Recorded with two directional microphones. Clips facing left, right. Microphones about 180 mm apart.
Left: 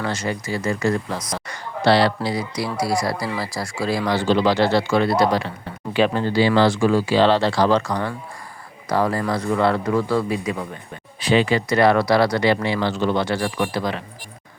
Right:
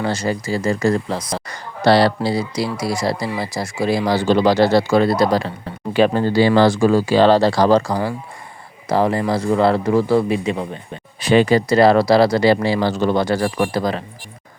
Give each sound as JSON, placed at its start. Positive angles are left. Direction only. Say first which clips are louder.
{"t": 0.0, "sound": "a man's voice", "louder": "right 4 dB", "side_deg": -35}
{"t": 4.0, "sound": "a man's voice", "louder": "right 2 dB", "side_deg": -40}
{"t": 11.2, "sound": "a man's voice", "louder": "right 4 dB", "side_deg": -45}